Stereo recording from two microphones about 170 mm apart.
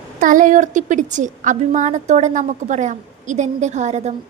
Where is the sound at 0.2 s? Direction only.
50° right (ahead or behind).